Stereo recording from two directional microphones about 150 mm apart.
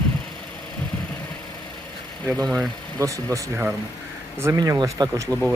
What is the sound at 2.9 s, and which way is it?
Speech, 20° right (ahead or behind).